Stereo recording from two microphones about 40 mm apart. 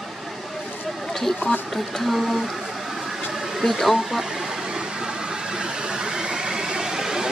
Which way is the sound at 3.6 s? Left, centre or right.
Centre.